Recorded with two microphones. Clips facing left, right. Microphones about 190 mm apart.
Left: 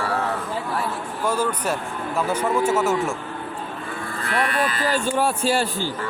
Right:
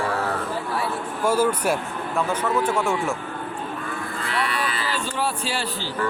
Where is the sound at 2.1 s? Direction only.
10° left (ahead or behind).